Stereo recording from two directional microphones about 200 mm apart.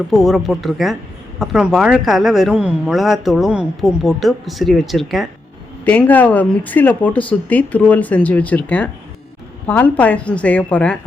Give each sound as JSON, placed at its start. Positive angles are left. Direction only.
{"t": 0.1, "sound": "speech", "side_deg": 0}